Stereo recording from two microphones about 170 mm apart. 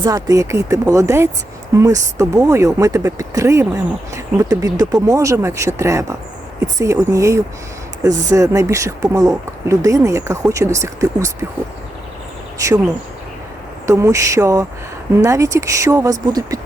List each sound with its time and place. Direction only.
0.0 s speech: 20° right (ahead or behind)
12.5 s speech: 20° right (ahead or behind)
13.8 s speech: 15° right (ahead or behind)